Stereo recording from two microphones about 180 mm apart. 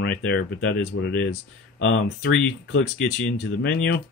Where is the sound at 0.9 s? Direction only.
90° left.